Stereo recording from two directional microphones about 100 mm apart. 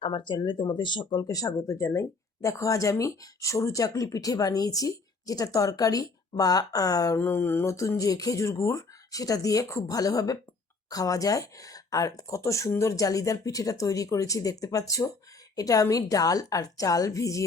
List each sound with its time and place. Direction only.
0.0 s speech: 50° left (ahead or behind)
1.2 s speech: 35° left (ahead or behind)
7.2 s speech: 20° left (ahead or behind)